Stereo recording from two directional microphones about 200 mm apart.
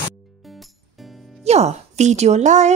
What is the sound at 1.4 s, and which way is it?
A woman's voice, 35° right (ahead or behind).